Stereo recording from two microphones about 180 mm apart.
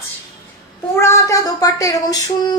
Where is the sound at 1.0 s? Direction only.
15° left (ahead or behind).